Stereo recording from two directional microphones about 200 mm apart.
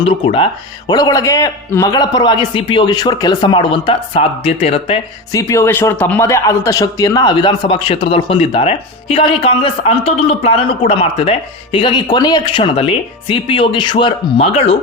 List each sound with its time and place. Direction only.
0.9 s speech: 20° left (ahead or behind)
5.3 s speech: 15° left (ahead or behind)